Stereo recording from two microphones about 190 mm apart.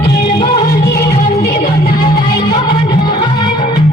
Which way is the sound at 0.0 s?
60° left (ahead or behind).